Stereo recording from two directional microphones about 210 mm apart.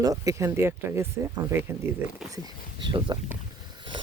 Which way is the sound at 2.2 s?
Centre (ahead or behind).